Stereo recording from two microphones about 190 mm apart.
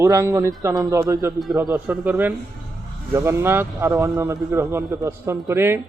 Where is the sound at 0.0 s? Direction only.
15° right (ahead or behind).